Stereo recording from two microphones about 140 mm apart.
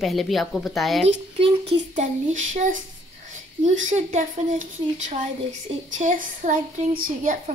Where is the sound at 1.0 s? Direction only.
45° right (ahead or behind).